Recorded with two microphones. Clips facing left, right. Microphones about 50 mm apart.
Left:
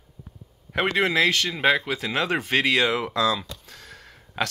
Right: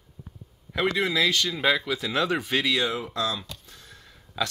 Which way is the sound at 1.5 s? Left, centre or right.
Left.